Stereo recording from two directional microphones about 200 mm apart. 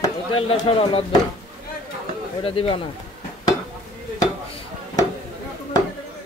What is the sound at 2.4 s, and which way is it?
Speech, 25° left (ahead or behind).